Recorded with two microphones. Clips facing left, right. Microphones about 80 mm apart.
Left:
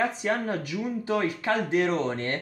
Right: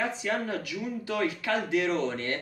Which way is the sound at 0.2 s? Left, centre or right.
Left.